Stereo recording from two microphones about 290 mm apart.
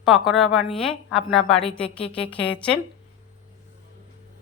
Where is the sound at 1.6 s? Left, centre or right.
Centre.